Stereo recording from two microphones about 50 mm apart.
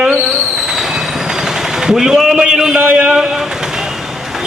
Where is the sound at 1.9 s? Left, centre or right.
Centre.